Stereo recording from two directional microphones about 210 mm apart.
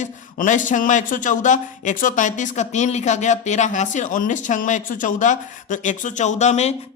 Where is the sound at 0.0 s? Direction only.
35° left (ahead or behind).